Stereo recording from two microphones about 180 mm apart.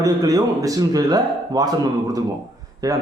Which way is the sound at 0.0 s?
20° right (ahead or behind).